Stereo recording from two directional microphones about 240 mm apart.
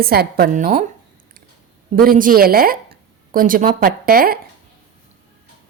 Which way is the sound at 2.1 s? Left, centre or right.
Right.